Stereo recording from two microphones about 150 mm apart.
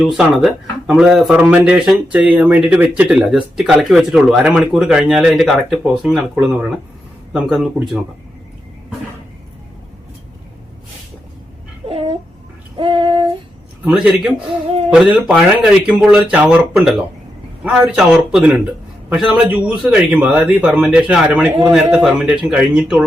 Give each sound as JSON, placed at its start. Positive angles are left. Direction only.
{"t": 0.0, "sound": "speech", "side_deg": 0}
{"t": 11.9, "sound": "a sound", "side_deg": -40}
{"t": 12.7, "sound": "female singing", "side_deg": -35}
{"t": 13.8, "sound": "a man's voice", "side_deg": -5}